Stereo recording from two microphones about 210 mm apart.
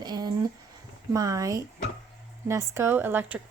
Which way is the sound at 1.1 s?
15° right (ahead or behind).